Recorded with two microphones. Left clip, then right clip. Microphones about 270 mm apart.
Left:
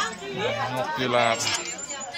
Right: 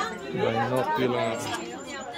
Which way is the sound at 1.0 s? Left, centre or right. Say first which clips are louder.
Left 4 dB; centre.